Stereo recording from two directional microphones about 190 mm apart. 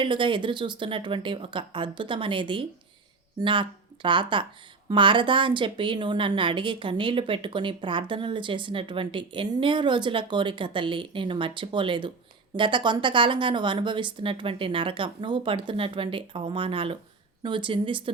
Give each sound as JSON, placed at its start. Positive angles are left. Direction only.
{"t": 0.0, "sound": "a woman's voice", "side_deg": -25}